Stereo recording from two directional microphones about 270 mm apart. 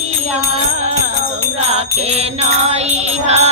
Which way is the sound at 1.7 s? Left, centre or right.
Right.